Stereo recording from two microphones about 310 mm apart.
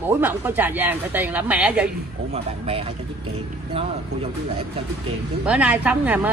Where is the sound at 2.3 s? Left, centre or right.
Centre.